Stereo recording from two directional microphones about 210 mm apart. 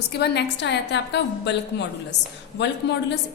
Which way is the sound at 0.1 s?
50° left (ahead or behind).